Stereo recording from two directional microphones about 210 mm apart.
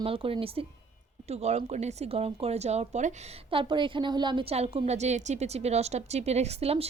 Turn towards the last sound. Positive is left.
turn(degrees=-30)  # may be behind; listen again after turning